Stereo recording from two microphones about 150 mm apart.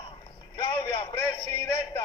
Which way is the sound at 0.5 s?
30° left (ahead or behind).